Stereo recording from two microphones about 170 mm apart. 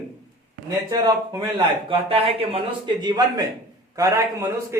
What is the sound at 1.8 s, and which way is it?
Speech, 35° right (ahead or behind).